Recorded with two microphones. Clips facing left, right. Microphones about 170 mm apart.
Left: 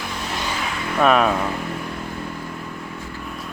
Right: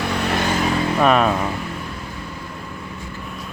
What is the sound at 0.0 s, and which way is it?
Vehicle, 65° right (ahead or behind).